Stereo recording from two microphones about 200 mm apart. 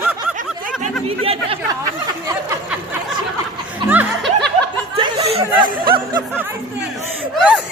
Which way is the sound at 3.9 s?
10° right (ahead or behind).